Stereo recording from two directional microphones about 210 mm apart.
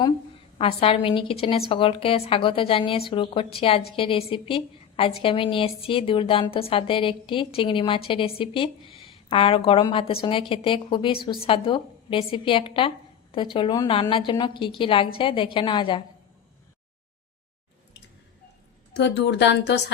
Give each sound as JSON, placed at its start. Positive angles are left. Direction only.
{"t": 0.0, "sound": "a woman's voice", "side_deg": 25}
{"t": 18.9, "sound": "speech", "side_deg": 55}